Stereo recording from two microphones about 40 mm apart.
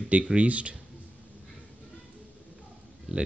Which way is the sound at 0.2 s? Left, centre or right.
Right.